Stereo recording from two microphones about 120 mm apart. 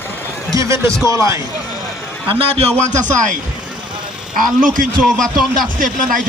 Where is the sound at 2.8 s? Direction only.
90° right.